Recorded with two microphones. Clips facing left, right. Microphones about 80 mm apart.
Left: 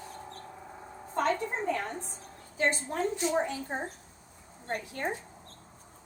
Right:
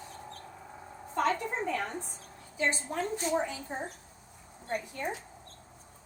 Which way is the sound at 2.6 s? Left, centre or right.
Left.